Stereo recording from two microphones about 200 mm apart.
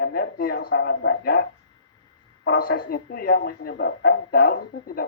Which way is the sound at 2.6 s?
45° left (ahead or behind).